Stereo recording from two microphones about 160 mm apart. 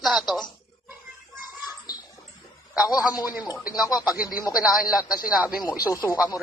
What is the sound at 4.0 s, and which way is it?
Speech, 10° right (ahead or behind).